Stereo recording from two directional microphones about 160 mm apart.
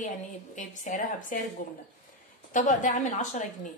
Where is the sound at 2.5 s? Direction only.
50° left (ahead or behind).